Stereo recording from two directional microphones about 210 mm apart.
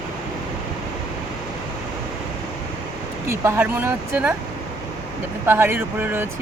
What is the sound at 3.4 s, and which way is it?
Speech, 10° right (ahead or behind).